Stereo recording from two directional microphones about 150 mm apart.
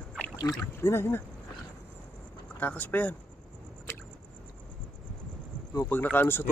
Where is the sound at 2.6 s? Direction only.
10° left (ahead or behind).